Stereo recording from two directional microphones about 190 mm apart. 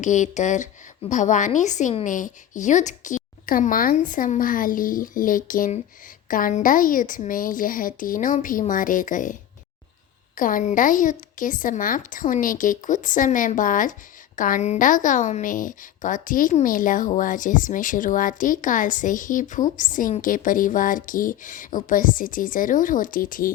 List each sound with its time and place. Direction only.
0.0 s a woman's voice: 40° left (ahead or behind)